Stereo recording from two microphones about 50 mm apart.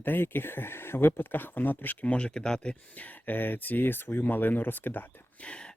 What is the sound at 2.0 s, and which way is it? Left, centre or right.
Speech, left.